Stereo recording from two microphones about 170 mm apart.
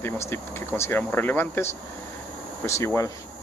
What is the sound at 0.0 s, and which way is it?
Speech, 15° left (ahead or behind).